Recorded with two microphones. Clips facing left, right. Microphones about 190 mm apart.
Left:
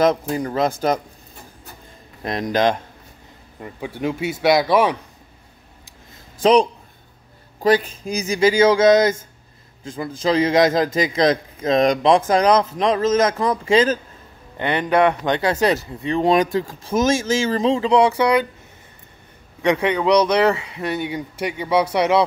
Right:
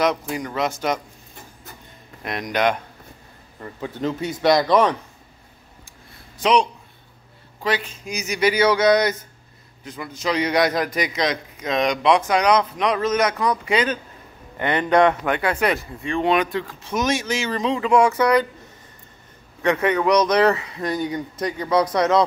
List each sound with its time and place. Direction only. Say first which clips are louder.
0.1 s speech: left 4 dB; 30° left (ahead or behind)
2.2 s a man's voice: left 3 dB; 30° left (ahead or behind)
3.5 s speech: left 1 dB; 10° left (ahead or behind)
6.4 s a man's voice: left 4 dB; 35° left (ahead or behind)
14.6 s speech: even; 15° left (ahead or behind)
15.2 s speech: left 3 dB; 30° left (ahead or behind)
19.6 s speech: left 1 dB; 15° left (ahead or behind)
20.4 s a man's voice: even; 25° left (ahead or behind)
20.9 s speech: right 1 dB; 10° left (ahead or behind)